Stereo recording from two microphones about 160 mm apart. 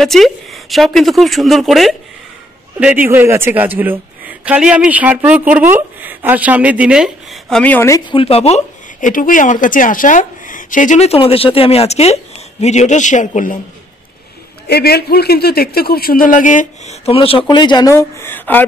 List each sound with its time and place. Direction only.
0.0 s a woman's voice: centre (ahead or behind)
8.1 s speech: 35° left (ahead or behind); by 13.6 s 55° left (ahead or behind)
14.7 s a man's voice: 80° left; by 18.6 s 10° left (ahead or behind)